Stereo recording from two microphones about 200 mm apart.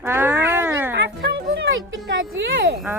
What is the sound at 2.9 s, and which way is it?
Speech, 10° right (ahead or behind).